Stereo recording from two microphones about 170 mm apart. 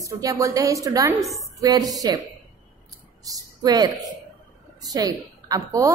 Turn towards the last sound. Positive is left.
turn(degrees=-20)  # may be behind; listen again after turning